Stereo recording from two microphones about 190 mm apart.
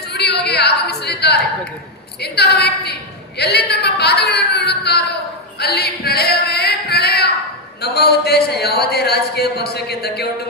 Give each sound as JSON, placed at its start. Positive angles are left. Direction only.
{"t": 0.1, "sound": "yodeling", "side_deg": 60}
{"t": 2.2, "sound": "a woman's voice", "side_deg": 60}
{"t": 5.5, "sound": "singing", "side_deg": 55}
{"t": 7.8, "sound": "a woman's voice", "side_deg": 60}